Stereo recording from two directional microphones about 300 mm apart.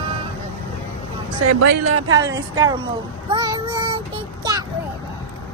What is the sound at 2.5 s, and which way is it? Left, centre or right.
Child singing, centre.